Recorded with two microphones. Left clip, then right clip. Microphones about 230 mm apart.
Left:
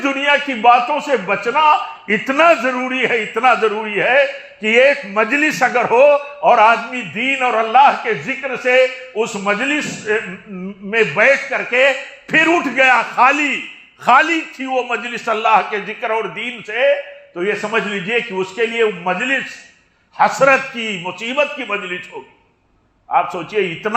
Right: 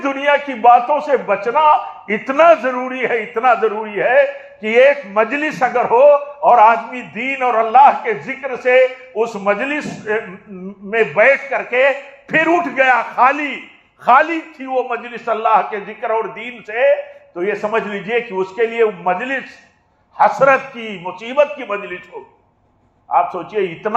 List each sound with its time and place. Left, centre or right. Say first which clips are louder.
0.0 s a man's voice: even; left
23.0 s a man's voice: right 1 dB; left